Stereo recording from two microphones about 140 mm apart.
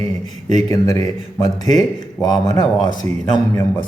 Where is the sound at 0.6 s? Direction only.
25° left (ahead or behind).